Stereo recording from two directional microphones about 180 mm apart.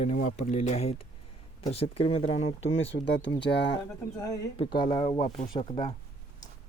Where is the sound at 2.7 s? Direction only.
90° left; by 3.7 s 70° left (ahead or behind).